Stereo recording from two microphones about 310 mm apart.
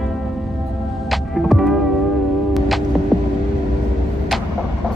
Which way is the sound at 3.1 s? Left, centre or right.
Centre.